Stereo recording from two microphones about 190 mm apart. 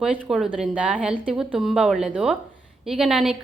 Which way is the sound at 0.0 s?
5° right (ahead or behind).